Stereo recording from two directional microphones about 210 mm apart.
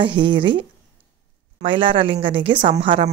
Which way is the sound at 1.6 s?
25° right (ahead or behind).